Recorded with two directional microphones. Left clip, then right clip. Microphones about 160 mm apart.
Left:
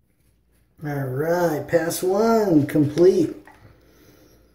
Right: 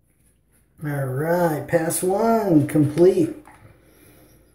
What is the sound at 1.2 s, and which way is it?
Speech, 25° left (ahead or behind).